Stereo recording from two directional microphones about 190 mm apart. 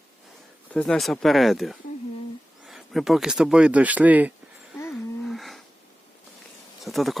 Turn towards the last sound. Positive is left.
turn(degrees=0)  # may be behind; listen again after turning